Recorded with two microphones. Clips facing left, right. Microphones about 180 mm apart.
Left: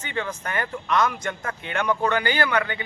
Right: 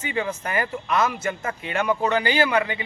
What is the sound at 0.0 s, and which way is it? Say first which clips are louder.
Speech: right 3 dB; 10° right (ahead or behind).